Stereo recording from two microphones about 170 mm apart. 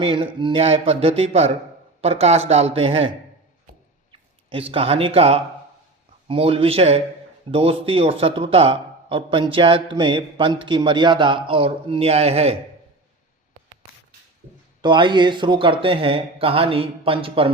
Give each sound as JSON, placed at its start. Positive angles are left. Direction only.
{"t": 0.0, "sound": "a man's voice", "side_deg": -30}
{"t": 4.1, "sound": "a sound", "side_deg": -30}
{"t": 4.7, "sound": "a man's voice", "side_deg": -35}
{"t": 14.8, "sound": "a man's voice", "side_deg": -30}